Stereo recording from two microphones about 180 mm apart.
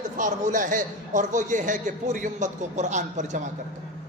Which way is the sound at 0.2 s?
45° right (ahead or behind).